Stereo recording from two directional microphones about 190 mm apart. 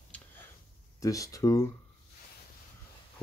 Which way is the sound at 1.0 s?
15° left (ahead or behind).